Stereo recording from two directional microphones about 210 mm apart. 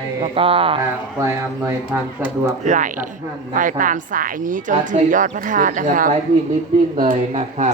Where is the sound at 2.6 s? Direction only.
35° right (ahead or behind).